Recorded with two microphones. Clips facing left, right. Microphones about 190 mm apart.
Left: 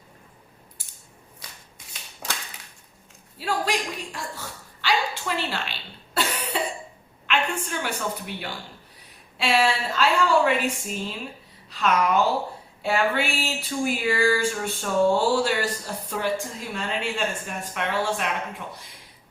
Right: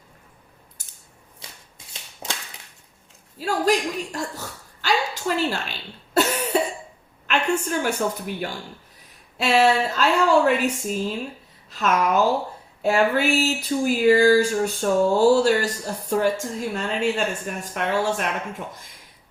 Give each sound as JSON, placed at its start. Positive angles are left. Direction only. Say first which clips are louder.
{"t": 0.8, "sound": "coin", "louder": "even", "side_deg": -45}
{"t": 1.4, "sound": "shuffling cards", "louder": "right 2 dB", "side_deg": -25}
{"t": 3.3, "sound": "a woman's voice", "louder": "right 5 dB", "side_deg": -40}
{"t": 4.8, "sound": "a sound", "louder": "right 2 dB", "side_deg": -45}
{"t": 6.5, "sound": "cough", "louder": "right 6 dB", "side_deg": -45}
{"t": 7.3, "sound": "a woman's voice", "louder": "right 4 dB", "side_deg": -45}
{"t": 12.8, "sound": "a sound", "louder": "right 4 dB", "side_deg": -40}
{"t": 17.7, "sound": "a woman's voice", "louder": "right 3 dB", "side_deg": -45}